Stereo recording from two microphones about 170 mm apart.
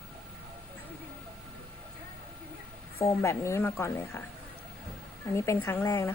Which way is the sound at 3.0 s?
15° left (ahead or behind).